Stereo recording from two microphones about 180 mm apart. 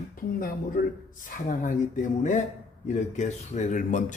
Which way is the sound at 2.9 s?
40° left (ahead or behind).